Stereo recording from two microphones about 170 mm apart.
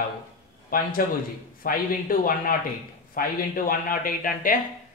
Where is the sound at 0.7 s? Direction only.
55° left (ahead or behind).